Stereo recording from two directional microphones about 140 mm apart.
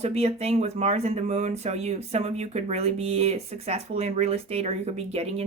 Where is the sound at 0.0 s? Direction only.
50° right (ahead or behind).